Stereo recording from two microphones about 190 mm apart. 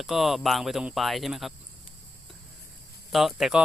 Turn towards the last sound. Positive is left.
turn(degrees=-5)  # may be behind; listen again after turning